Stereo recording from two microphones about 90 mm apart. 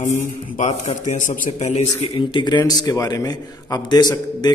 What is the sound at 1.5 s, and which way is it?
Speech, 90° left.